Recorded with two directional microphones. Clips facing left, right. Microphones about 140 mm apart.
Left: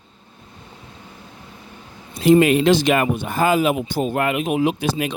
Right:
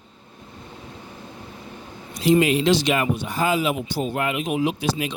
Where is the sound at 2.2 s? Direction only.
55° left (ahead or behind).